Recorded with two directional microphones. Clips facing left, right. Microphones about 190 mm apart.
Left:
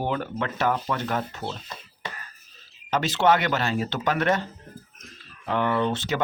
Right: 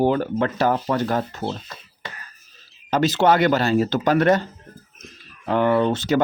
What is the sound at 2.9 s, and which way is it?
Speech, 40° right (ahead or behind).